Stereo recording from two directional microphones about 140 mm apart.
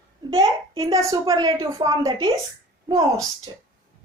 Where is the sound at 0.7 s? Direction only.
30° right (ahead or behind).